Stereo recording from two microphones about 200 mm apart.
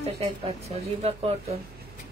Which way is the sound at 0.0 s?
30° right (ahead or behind).